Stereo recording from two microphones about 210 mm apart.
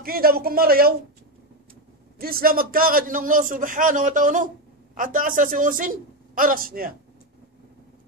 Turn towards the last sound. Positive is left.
turn(degrees=-45)  # may be behind; listen again after turning